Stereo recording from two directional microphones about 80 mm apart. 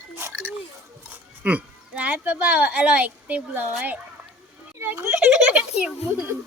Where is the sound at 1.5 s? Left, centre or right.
Centre.